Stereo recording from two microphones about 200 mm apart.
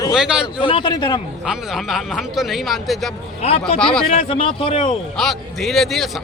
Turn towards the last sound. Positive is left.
turn(degrees=0)  # may be behind; listen again after turning